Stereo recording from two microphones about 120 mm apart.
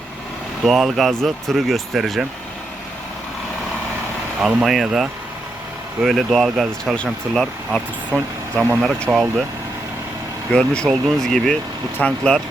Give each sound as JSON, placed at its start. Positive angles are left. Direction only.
{"t": 0.6, "sound": "speech", "side_deg": 0}
{"t": 4.4, "sound": "speech", "side_deg": -5}
{"t": 8.5, "sound": "speech", "side_deg": -15}
{"t": 10.5, "sound": "speech", "side_deg": 5}